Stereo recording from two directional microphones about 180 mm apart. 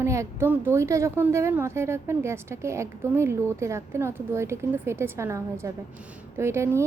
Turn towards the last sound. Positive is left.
turn(degrees=-15)  # may be behind; listen again after turning